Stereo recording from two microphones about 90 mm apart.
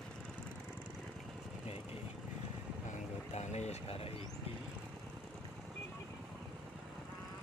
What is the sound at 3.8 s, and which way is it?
Speech, 90° left.